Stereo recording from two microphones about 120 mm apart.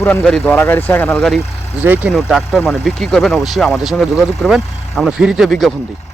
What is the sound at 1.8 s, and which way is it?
Speech, 15° right (ahead or behind).